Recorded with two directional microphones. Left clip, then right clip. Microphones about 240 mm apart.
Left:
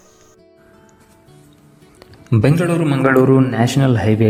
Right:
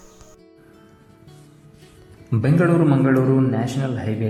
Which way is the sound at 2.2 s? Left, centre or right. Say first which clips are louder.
Left 3 dB; left.